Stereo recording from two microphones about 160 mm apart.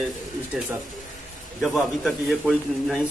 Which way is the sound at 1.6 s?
Centre (ahead or behind).